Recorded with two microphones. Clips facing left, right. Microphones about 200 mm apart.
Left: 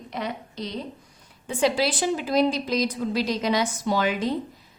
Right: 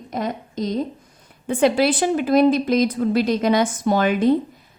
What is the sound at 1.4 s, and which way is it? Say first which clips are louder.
A woman's voice: right 6 dB; 55° right (ahead or behind).